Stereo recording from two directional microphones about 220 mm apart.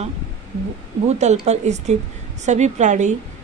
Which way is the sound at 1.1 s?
30° right (ahead or behind).